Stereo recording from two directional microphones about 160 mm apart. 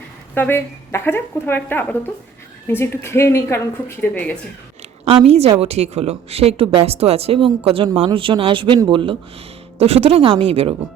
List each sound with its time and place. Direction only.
0.3 s a woman's voice: 15° left (ahead or behind)
5.2 s a woman's voice: 40° right (ahead or behind)